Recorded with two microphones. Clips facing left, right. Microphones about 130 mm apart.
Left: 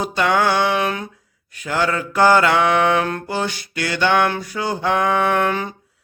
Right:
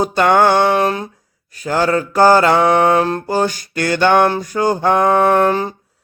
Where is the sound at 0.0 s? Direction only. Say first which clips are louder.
Right 6 dB; 50° right (ahead or behind).